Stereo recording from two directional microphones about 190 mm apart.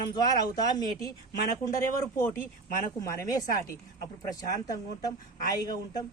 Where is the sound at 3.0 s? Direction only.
15° left (ahead or behind).